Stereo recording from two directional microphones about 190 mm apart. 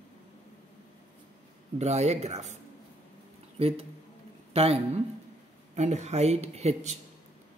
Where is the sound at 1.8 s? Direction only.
35° right (ahead or behind).